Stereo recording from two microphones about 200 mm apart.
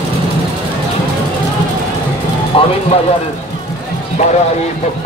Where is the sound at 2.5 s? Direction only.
30° left (ahead or behind).